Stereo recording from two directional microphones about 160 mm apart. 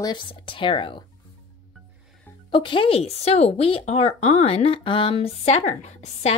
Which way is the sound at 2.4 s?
30° left (ahead or behind).